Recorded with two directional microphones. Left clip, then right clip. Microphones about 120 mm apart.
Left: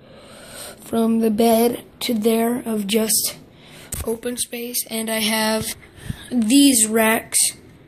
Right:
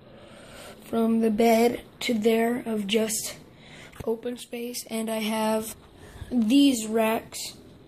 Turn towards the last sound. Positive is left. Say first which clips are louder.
# left 7 dB
turn(degrees=5)  # may be behind; listen again after turning